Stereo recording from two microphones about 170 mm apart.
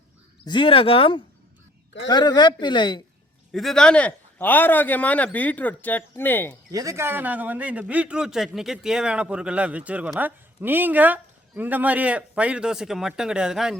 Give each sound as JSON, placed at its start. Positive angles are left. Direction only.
{"t": 0.4, "sound": "speech", "side_deg": 30}
{"t": 3.5, "sound": "a man's voice", "side_deg": 0}
{"t": 6.7, "sound": "a man's voice", "side_deg": -20}